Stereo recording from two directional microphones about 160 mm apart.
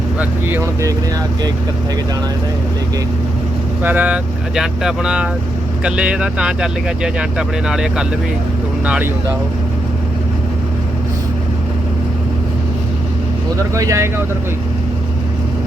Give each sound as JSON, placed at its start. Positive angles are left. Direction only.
{"t": 0.2, "sound": "speech", "side_deg": -15}
{"t": 3.8, "sound": "speech", "side_deg": -10}
{"t": 13.7, "sound": "speech", "side_deg": -20}